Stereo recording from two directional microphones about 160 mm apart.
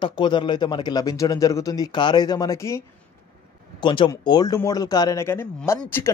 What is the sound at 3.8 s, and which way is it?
Speech, 30° left (ahead or behind).